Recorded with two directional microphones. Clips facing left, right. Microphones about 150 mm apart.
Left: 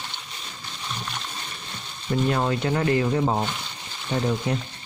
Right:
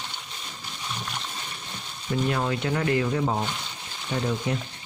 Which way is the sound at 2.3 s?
40° left (ahead or behind).